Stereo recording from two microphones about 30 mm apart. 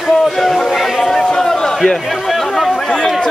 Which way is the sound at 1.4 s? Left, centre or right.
Centre.